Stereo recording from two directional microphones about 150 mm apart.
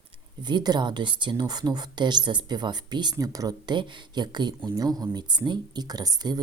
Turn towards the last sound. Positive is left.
turn(degrees=-25)  # may be behind; listen again after turning